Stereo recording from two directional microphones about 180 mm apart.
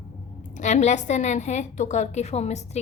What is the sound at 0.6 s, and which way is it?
A woman's voice, 40° left (ahead or behind).